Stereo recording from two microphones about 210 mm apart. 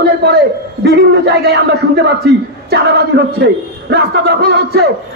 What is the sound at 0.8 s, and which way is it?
A man's voice, 50° right (ahead or behind).